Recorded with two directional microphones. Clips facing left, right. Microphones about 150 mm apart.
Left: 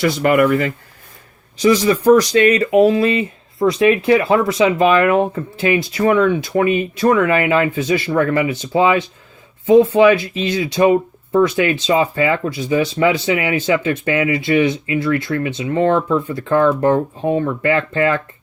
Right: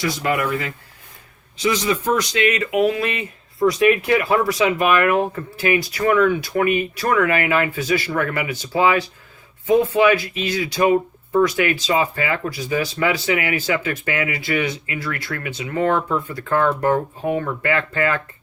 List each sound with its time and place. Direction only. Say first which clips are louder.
0.0 s speech: left 7 dB; 65° left (ahead or behind)
1.5 s speech: left 7 dB; 40° left (ahead or behind)